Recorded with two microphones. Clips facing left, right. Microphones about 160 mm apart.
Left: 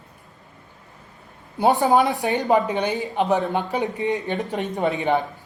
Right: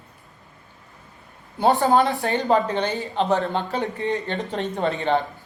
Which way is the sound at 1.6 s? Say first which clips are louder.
Even; 15° left (ahead or behind).